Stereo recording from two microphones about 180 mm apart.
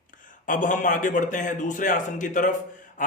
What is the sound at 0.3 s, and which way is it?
A man's voice, 45° left (ahead or behind).